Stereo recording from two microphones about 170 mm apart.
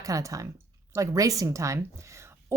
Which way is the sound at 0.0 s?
20° right (ahead or behind).